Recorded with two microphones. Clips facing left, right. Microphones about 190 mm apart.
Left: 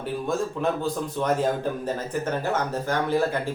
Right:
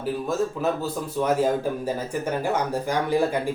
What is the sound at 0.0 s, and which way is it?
A man's voice, 5° right (ahead or behind).